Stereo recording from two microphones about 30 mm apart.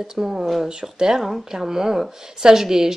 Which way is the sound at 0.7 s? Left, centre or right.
Right.